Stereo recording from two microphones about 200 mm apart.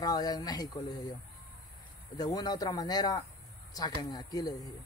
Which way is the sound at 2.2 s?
20° left (ahead or behind).